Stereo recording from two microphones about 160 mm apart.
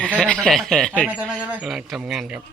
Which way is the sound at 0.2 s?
5° left (ahead or behind).